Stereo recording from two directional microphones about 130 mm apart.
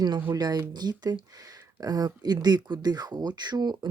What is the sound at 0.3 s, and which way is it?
Speech, 30° right (ahead or behind).